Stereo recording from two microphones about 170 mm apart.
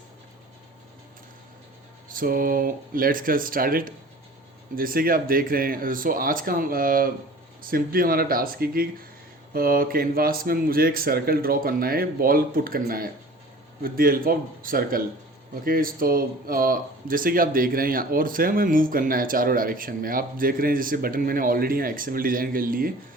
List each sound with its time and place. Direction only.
2.0 s speech: 55° right (ahead or behind)